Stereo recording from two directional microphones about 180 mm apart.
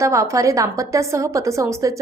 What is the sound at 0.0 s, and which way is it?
A woman's voice, 15° right (ahead or behind).